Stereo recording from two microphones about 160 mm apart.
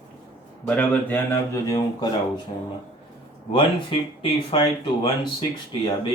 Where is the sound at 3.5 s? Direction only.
30° left (ahead or behind).